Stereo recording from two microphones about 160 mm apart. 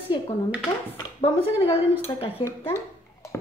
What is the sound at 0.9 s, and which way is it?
Speech, 35° left (ahead or behind).